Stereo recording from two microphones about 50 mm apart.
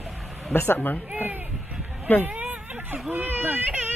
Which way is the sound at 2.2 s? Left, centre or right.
Right.